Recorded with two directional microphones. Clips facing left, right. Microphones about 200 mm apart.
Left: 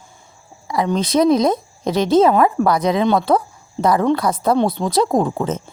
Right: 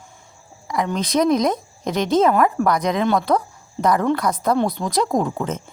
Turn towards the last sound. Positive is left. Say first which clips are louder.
# left 3 dB
turn(degrees=30)  # may be behind; listen again after turning